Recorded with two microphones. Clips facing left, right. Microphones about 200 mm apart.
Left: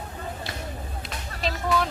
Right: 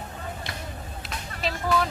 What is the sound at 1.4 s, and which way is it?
Music, centre (ahead or behind).